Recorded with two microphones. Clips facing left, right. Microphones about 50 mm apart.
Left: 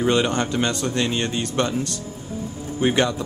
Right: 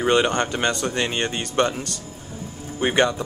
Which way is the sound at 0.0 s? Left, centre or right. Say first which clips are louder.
Right 1 dB; centre.